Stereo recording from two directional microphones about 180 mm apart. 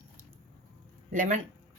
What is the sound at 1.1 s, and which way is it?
Speech, 45° right (ahead or behind).